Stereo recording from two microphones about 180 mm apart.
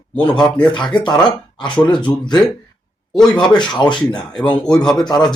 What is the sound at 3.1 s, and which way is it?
Speech, centre (ahead or behind).